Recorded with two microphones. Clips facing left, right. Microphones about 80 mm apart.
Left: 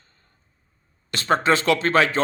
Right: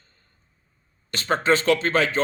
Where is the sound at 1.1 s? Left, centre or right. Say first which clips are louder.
Left 1 dB; left.